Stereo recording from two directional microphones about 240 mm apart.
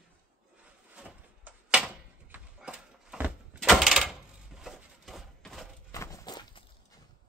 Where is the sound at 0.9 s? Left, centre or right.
Centre.